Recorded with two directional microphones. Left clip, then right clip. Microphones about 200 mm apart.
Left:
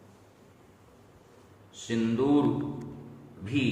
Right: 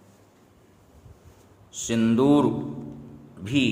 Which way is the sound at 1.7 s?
55° right (ahead or behind).